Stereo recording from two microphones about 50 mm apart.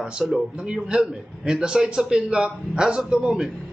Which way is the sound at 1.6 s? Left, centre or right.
Centre.